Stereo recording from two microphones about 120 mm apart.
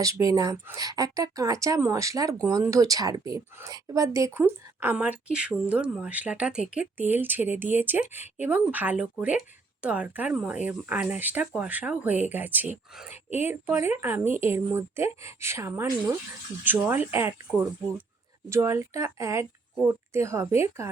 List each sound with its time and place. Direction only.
0.0 s a woman's voice: 30° right (ahead or behind)
18.4 s speech: 20° right (ahead or behind)